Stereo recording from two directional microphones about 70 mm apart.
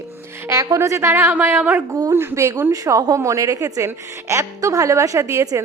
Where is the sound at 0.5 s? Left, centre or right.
Right.